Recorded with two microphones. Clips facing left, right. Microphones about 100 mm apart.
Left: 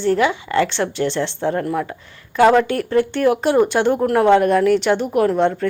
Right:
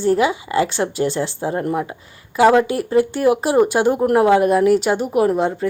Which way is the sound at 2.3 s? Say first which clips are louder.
Even; 5° right (ahead or behind).